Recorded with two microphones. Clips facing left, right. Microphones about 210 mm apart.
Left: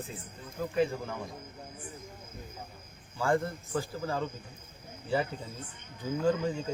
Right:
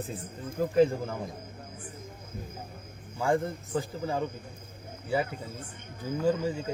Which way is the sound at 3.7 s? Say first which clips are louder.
Right 2 dB; 15° right (ahead or behind).